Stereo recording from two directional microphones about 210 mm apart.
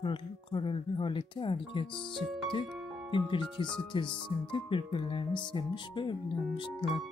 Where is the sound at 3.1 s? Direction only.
25° left (ahead or behind).